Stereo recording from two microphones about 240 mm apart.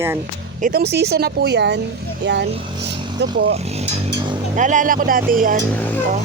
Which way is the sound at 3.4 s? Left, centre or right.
Right.